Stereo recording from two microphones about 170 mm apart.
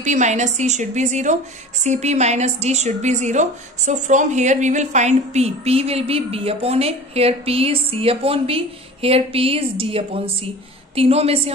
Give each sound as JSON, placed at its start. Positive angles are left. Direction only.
{"t": 0.0, "sound": "a woman's voice", "side_deg": -45}